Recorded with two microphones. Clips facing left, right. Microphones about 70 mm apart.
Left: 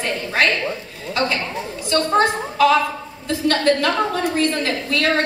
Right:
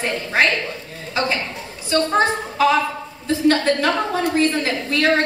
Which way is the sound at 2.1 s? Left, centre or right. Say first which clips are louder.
Left 1 dB; centre.